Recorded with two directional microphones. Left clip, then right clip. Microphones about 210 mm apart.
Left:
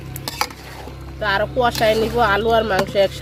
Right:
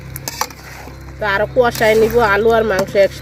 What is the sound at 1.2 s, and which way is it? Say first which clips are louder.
Speech: right 4 dB; 40° right (ahead or behind).